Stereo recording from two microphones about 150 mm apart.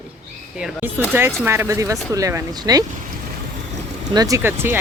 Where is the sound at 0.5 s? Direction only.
5° right (ahead or behind); by 2.8 s 25° right (ahead or behind).